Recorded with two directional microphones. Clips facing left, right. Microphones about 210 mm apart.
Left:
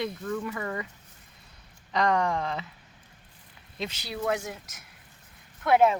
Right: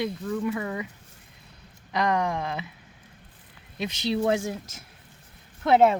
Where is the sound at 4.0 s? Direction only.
25° right (ahead or behind).